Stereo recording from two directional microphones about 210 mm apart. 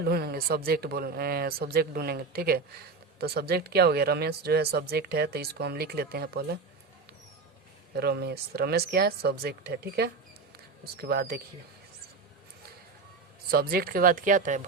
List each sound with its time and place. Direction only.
0.0 s speech: 45° right (ahead or behind)
7.9 s speech: 50° right (ahead or behind)
13.5 s speech: 45° right (ahead or behind)